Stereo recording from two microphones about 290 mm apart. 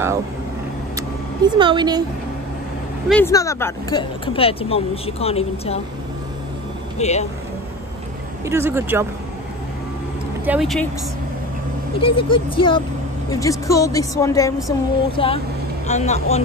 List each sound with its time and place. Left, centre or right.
0.9 s vehicle: centre
3.1 s speech: centre
7.0 s speech: left
8.5 s speech: centre
10.4 s speech: centre
11.9 s speech: centre